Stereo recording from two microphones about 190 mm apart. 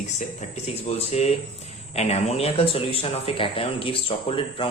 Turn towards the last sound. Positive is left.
turn(degrees=30)  # may be behind; listen again after turning